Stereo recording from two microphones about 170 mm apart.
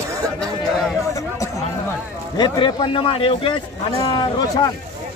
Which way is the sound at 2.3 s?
25° left (ahead or behind).